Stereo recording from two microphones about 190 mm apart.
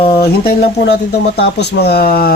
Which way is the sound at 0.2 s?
55° left (ahead or behind).